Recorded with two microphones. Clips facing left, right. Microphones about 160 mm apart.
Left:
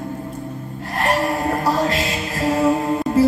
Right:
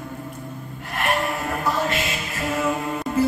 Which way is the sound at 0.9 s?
35° left (ahead or behind).